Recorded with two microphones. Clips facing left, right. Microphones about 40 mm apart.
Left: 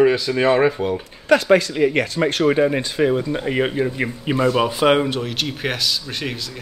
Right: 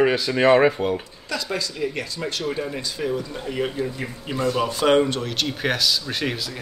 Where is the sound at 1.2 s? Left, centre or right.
Left.